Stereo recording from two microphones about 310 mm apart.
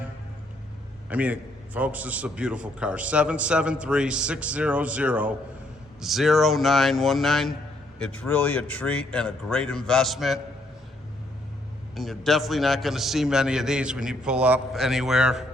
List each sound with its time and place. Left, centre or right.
1.1 s a man's voice: centre
11.9 s a man's voice: centre